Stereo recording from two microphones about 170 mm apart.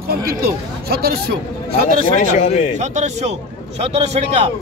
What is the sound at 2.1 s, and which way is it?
Speech, 45° left (ahead or behind).